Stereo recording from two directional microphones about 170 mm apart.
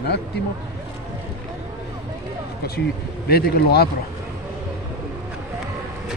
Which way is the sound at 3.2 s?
65° left (ahead or behind).